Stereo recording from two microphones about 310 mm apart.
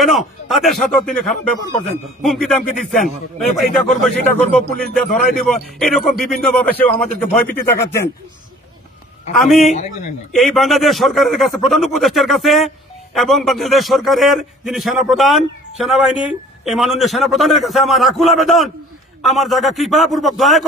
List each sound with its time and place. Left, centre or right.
0.0 s a man's voice: centre
9.3 s a man's voice: centre
9.6 s a man's voice: left
10.3 s a man's voice: centre